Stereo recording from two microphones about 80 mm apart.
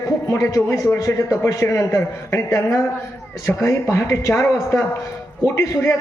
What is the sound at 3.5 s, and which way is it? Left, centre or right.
Speech, left.